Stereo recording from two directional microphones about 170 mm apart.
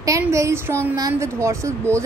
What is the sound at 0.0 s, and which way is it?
A woman's voice, 20° right (ahead or behind).